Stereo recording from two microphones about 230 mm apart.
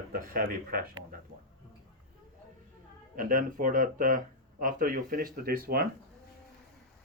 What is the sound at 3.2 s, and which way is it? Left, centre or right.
Speech, right.